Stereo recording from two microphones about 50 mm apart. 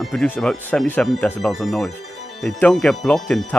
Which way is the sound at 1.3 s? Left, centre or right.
Centre.